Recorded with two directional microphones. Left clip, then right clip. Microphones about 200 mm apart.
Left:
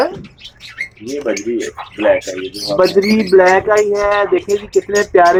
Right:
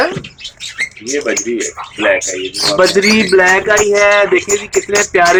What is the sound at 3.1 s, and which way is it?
Speech, 10° right (ahead or behind).